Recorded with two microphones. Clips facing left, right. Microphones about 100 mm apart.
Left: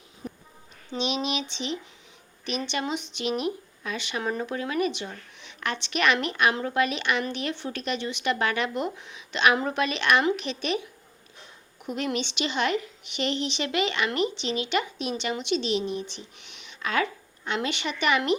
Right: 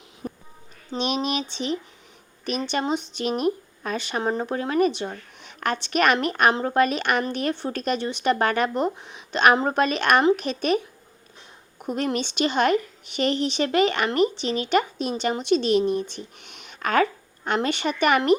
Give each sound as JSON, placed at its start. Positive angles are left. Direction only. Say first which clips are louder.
{"t": 0.9, "sound": "speech", "louder": "right 3 dB", "side_deg": -45}